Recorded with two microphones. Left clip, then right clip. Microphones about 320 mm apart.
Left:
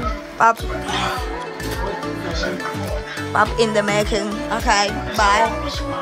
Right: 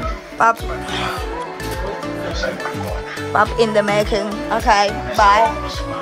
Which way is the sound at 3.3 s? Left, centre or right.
Centre.